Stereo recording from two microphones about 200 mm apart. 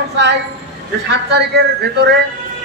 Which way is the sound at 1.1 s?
55° right (ahead or behind).